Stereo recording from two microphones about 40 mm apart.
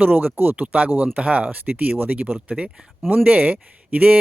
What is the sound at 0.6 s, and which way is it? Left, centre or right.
Speech, right.